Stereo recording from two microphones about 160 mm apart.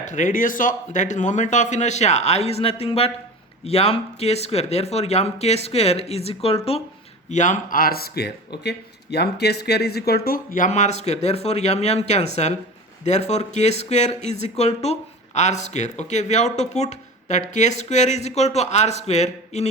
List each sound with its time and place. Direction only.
0.0 s speech: 50° left (ahead or behind)
7.3 s speech: 50° left (ahead or behind)